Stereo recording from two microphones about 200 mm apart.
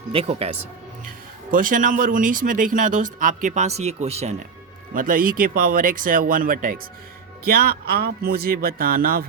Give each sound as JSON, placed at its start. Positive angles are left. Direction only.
{"t": 0.1, "sound": "speech", "side_deg": -30}
{"t": 1.5, "sound": "speech", "side_deg": -45}
{"t": 4.9, "sound": "speech", "side_deg": -45}